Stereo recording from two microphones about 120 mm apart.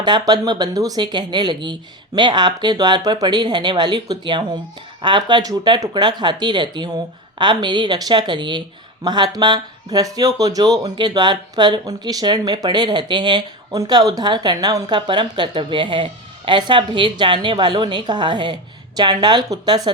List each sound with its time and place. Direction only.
0.0 s speech: 35° right (ahead or behind)